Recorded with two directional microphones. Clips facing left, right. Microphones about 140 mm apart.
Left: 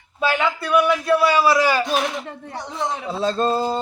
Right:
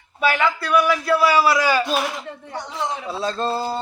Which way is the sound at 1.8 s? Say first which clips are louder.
Left 1 dB; centre (ahead or behind).